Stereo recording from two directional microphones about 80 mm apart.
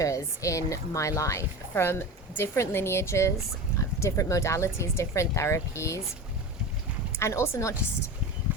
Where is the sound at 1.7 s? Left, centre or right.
Left.